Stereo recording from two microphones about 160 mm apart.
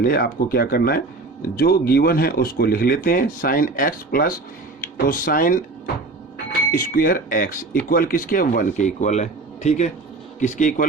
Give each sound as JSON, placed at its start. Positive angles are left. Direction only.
{"t": 0.0, "sound": "a man's voice", "side_deg": 70}